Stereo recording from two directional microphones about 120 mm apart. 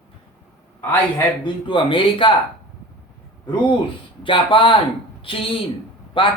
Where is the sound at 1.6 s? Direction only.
45° left (ahead or behind).